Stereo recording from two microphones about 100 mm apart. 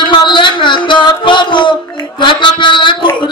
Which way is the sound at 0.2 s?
50° left (ahead or behind).